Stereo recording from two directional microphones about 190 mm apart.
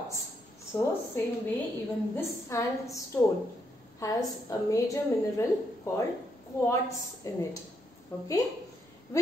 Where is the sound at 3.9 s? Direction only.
20° left (ahead or behind).